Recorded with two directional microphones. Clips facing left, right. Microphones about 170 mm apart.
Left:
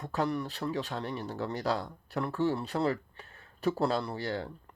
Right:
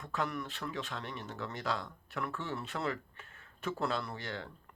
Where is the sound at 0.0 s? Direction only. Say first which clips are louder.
Left 6 dB; 35° left (ahead or behind).